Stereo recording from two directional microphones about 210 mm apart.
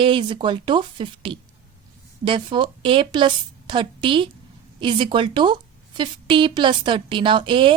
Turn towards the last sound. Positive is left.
turn(degrees=-25)  # may be behind; listen again after turning